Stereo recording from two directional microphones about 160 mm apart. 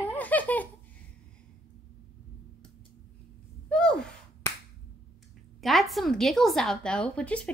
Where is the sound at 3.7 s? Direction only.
5° left (ahead or behind).